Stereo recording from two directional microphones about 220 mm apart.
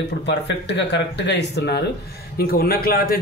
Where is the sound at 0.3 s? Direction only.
50° left (ahead or behind).